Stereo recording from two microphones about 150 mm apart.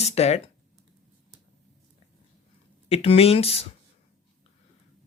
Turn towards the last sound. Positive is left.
turn(degrees=40)  # may be behind; listen again after turning